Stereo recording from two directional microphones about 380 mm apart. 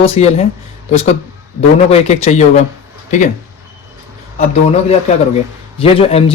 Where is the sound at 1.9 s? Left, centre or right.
Centre.